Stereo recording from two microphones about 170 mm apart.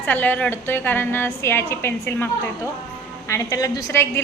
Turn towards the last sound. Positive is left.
turn(degrees=15)  # may be behind; listen again after turning